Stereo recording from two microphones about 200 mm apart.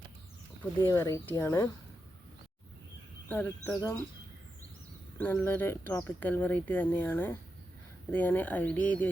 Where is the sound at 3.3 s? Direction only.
10° left (ahead or behind).